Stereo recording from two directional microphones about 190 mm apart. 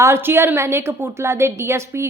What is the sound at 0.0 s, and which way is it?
A woman's voice, 15° right (ahead or behind).